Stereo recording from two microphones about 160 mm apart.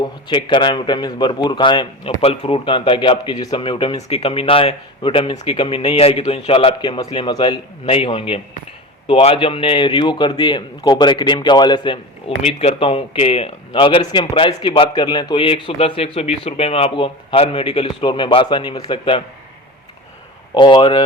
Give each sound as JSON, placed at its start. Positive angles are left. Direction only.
{"t": 0.0, "sound": "a man's voice", "side_deg": 30}
{"t": 12.4, "sound": "a man's voice", "side_deg": 40}
{"t": 20.5, "sound": "a man's voice", "side_deg": 30}